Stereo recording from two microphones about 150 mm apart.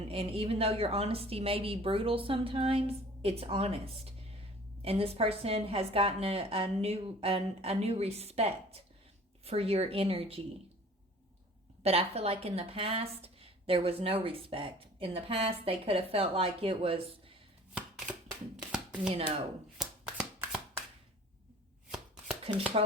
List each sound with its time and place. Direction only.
0.1 s a woman's voice: 40° right (ahead or behind)
11.8 s a woman's voice: 45° right (ahead or behind)
17.7 s a sound: 5° right (ahead or behind)
18.5 s hands: 5° right (ahead or behind)
19.8 s shuffling cards: 5° right (ahead or behind)
22.5 s a woman's voice: 40° right (ahead or behind)